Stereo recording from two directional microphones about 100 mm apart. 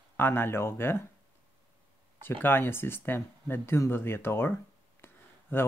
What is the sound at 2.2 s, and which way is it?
Speech, 20° left (ahead or behind).